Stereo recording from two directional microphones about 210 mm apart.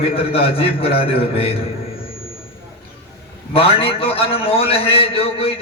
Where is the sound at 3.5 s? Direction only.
25° left (ahead or behind).